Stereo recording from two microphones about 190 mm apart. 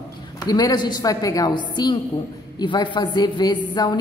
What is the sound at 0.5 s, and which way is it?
A woman's voice, 20° left (ahead or behind).